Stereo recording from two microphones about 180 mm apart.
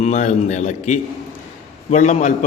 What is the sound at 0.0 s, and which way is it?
A man's voice, 40° left (ahead or behind).